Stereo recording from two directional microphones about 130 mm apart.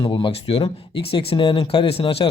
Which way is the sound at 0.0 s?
40° left (ahead or behind).